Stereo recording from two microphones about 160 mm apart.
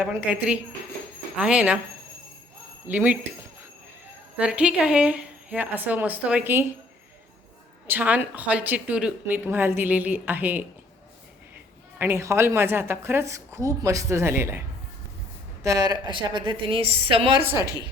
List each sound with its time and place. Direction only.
0.0 s a woman's voice: 10° right (ahead or behind)
2.8 s a woman's voice: 10° right (ahead or behind)
4.4 s a woman's voice: 5° right (ahead or behind)
7.9 s a woman's voice: 10° right (ahead or behind)
11.9 s a woman's voice: 15° right (ahead or behind)
15.6 s a woman's voice: 20° right (ahead or behind)
17.4 s a woman's voice: 15° right (ahead or behind)